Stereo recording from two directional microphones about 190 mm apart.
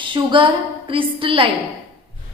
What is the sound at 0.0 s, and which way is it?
A woman's voice, 25° right (ahead or behind).